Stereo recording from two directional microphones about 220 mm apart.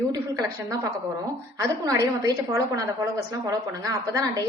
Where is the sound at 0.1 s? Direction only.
15° right (ahead or behind).